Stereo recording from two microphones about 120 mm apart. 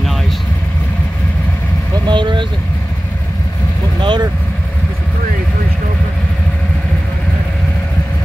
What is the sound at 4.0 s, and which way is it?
Speech, 40° right (ahead or behind).